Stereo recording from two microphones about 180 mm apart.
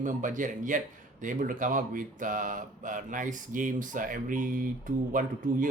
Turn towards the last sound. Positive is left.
turn(degrees=-50)  # may be behind; listen again after turning